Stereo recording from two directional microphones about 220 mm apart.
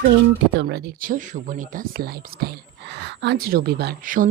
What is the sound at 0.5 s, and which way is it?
Speech, 50° right (ahead or behind).